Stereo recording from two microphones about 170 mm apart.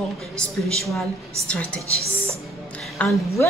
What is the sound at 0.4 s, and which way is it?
A man's voice, centre (ahead or behind).